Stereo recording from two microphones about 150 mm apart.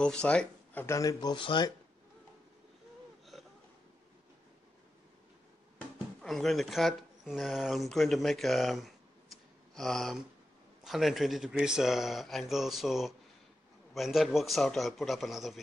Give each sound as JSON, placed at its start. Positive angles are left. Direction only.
{"t": 0.0, "sound": "speech", "side_deg": 5}
{"t": 0.8, "sound": "speech", "side_deg": 20}
{"t": 5.8, "sound": "speech", "side_deg": 0}